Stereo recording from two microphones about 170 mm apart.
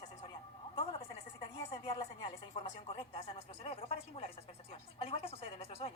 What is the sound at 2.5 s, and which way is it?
A woman's voice, 35° left (ahead or behind).